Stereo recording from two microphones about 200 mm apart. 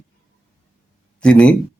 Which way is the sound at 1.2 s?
5° left (ahead or behind).